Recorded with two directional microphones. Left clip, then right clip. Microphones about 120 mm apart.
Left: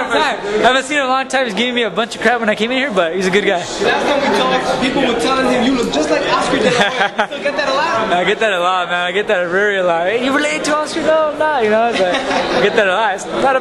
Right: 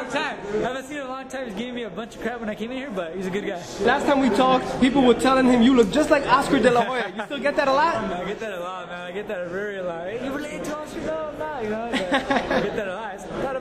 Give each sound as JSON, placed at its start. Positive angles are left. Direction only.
{"t": 0.6, "sound": "a man's voice", "side_deg": 35}
{"t": 7.4, "sound": "speech", "side_deg": -5}
{"t": 8.1, "sound": "a man's voice", "side_deg": 30}